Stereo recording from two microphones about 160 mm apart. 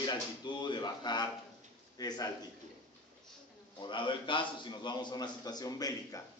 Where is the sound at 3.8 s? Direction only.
30° left (ahead or behind).